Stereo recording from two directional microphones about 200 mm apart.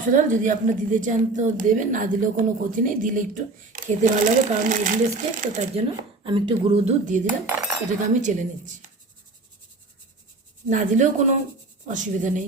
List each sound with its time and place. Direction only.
0.1 s a woman's voice: 40° right (ahead or behind)
6.2 s speech: 25° right (ahead or behind)
7.3 s cutlery: 10° right (ahead or behind)
7.9 s a woman's voice: 40° right (ahead or behind)
10.7 s a woman's voice: 40° right (ahead or behind)